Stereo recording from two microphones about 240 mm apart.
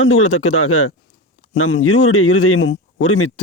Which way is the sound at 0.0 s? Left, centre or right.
Left.